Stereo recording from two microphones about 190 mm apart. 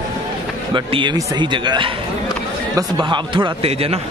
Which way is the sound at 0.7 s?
25° right (ahead or behind).